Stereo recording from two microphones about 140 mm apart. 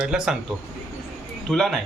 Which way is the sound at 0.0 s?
5° right (ahead or behind).